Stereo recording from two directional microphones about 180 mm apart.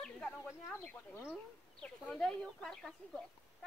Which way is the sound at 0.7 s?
15° left (ahead or behind).